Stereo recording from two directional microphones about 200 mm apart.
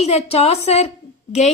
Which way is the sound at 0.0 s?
30° left (ahead or behind).